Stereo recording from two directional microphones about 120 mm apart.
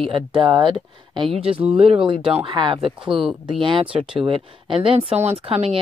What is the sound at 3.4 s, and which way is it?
A woman's voice, 45° right (ahead or behind).